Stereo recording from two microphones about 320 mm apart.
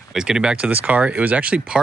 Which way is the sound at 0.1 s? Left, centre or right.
Centre.